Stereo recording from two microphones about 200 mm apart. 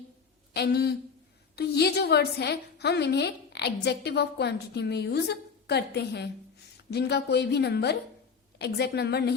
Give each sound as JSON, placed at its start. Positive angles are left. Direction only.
{"t": 0.5, "sound": "speech", "side_deg": 55}